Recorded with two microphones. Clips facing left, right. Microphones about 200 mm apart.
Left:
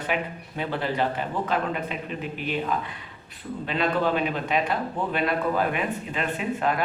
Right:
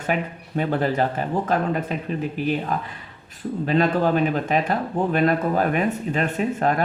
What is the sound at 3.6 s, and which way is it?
Speech, 45° right (ahead or behind).